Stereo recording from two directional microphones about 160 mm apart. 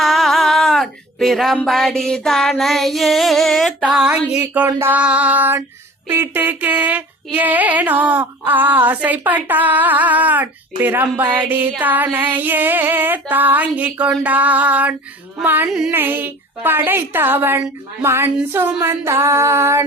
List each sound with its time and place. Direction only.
0.0 s music: centre (ahead or behind)
6.1 s speech: 15° right (ahead or behind)